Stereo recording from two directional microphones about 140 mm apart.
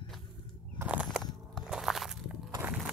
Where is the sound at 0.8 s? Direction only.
5° right (ahead or behind).